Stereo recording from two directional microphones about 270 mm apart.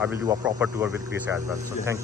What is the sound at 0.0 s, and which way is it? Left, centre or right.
Speech, centre.